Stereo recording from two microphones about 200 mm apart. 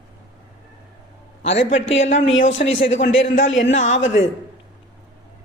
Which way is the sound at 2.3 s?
70° left (ahead or behind).